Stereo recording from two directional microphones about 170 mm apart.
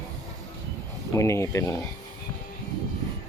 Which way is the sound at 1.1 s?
15° left (ahead or behind).